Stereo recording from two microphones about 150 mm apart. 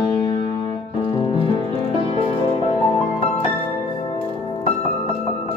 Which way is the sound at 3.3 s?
35° left (ahead or behind).